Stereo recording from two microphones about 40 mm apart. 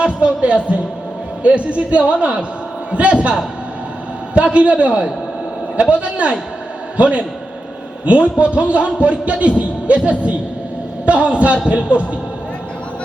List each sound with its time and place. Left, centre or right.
0.0 s a man's voice: right
4.4 s a man's voice: right